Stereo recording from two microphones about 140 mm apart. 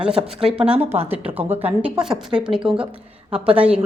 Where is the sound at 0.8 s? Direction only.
50° right (ahead or behind).